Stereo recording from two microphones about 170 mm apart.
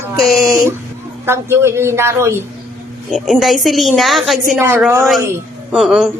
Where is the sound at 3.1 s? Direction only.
Centre (ahead or behind).